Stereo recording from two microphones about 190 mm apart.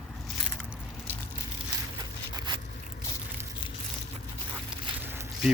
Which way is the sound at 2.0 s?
20° right (ahead or behind).